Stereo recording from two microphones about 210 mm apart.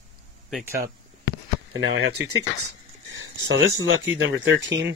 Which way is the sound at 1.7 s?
65° right (ahead or behind).